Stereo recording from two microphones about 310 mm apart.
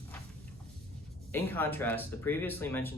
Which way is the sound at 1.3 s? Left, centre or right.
Centre.